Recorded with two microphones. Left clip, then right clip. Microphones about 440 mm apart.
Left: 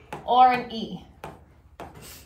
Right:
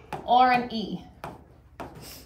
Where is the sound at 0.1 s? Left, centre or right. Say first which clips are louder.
Left 2 dB; centre.